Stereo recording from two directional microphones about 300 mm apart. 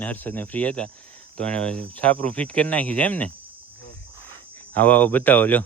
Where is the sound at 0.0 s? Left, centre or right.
Centre.